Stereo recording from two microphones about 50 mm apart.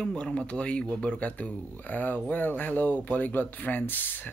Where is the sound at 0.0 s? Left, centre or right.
Centre.